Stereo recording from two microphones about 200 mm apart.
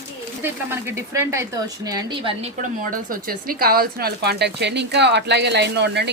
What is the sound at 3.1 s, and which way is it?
A woman's voice, 45° right (ahead or behind).